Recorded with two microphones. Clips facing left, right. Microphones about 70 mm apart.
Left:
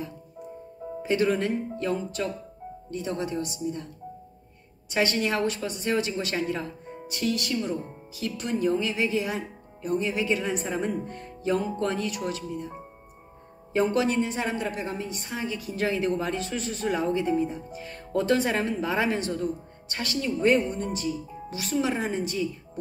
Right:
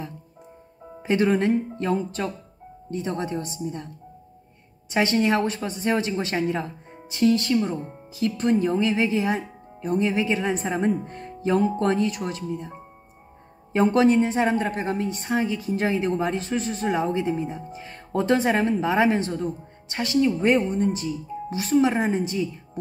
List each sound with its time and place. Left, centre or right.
1.0 s speech: right
4.9 s a woman's voice: right
13.7 s a woman's voice: right